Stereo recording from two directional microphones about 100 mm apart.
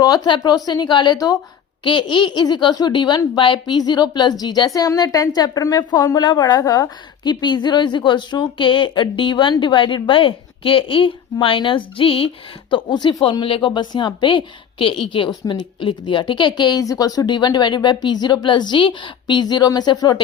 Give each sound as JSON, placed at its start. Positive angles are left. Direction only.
{"t": 0.0, "sound": "a woman's voice", "side_deg": 40}
{"t": 1.8, "sound": "a woman's voice", "side_deg": 55}
{"t": 12.7, "sound": "a woman's voice", "side_deg": 50}
{"t": 13.4, "sound": "a woman's voice", "side_deg": 60}
{"t": 16.8, "sound": "a woman's voice", "side_deg": 35}